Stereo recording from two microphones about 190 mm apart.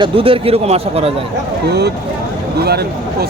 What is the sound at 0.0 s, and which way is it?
Speech, 30° right (ahead or behind).